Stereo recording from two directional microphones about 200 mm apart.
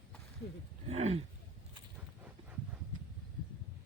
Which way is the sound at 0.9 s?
30° right (ahead or behind).